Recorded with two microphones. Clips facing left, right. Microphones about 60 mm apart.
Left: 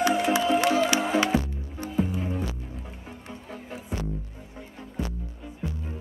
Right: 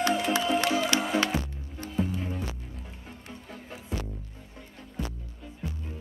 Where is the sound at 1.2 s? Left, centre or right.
Centre.